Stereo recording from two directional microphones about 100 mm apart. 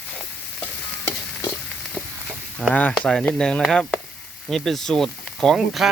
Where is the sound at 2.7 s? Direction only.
15° left (ahead or behind).